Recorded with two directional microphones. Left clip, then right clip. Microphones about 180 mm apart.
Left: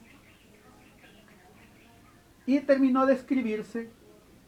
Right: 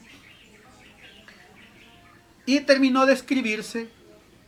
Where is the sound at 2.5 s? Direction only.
20° right (ahead or behind).